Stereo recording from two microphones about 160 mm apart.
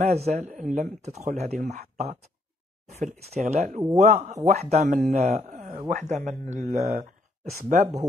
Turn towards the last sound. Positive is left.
turn(degrees=-60)  # may be behind; listen again after turning